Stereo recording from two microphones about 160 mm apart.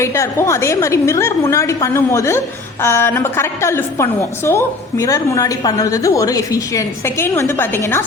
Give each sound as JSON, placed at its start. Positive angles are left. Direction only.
{"t": 0.0, "sound": "a woman's voice", "side_deg": 15}